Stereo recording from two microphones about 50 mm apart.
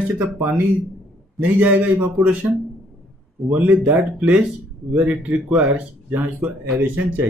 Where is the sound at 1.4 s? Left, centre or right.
Right.